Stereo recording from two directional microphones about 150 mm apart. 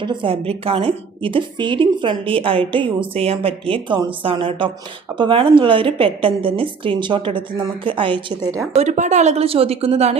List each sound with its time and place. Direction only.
0.0 s a woman's voice: 35° right (ahead or behind)
8.7 s a woman's voice: 50° right (ahead or behind)